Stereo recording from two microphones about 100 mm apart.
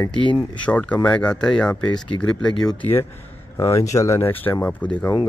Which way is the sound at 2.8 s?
20° left (ahead or behind).